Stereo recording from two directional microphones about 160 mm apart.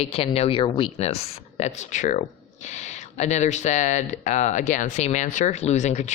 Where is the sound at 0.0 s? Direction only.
40° left (ahead or behind).